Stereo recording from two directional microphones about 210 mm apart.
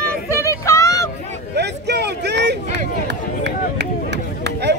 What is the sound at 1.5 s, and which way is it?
A man's voice, 55° right (ahead or behind).